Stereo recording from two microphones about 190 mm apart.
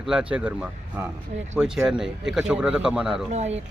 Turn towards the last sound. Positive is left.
turn(degrees=-35)  # may be behind; listen again after turning